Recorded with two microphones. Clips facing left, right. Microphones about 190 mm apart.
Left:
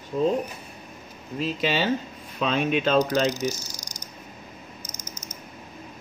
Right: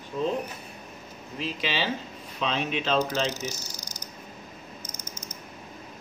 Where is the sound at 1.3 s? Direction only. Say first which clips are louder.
Left 5 dB; 45° left (ahead or behind).